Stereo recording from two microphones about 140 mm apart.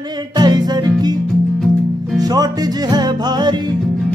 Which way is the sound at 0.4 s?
30° right (ahead or behind).